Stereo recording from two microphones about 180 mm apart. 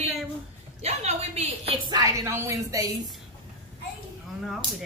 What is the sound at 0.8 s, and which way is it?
Speech, 35° right (ahead or behind).